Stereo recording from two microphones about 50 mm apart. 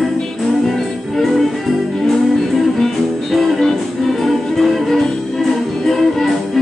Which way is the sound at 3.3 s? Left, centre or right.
Centre.